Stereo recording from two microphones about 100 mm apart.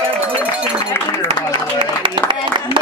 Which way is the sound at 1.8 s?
55° right (ahead or behind).